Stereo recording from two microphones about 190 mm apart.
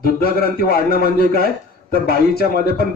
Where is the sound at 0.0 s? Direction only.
50° left (ahead or behind).